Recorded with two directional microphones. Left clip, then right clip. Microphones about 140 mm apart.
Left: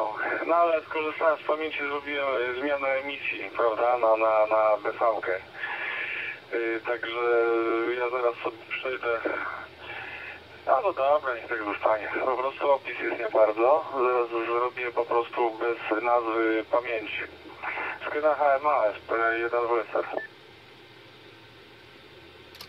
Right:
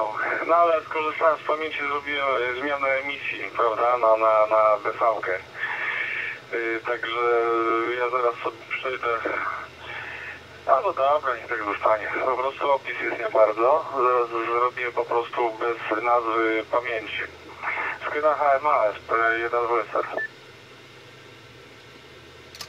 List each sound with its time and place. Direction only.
0.0 s speech: 40° left (ahead or behind)